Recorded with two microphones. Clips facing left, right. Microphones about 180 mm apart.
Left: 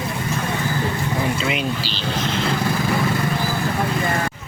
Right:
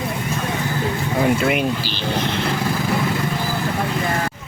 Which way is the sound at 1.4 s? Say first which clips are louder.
Right 4 dB; 50° right (ahead or behind).